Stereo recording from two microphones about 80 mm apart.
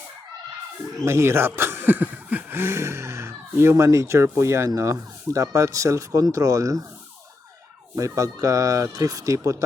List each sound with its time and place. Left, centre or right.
1.0 s speech: right
7.9 s speech: right